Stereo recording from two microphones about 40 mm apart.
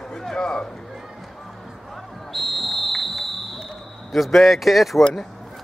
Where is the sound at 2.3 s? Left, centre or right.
Centre.